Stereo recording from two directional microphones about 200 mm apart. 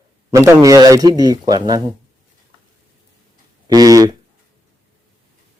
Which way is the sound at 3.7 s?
20° right (ahead or behind).